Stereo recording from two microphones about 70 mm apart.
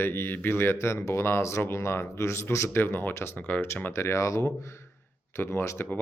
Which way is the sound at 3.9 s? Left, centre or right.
Left.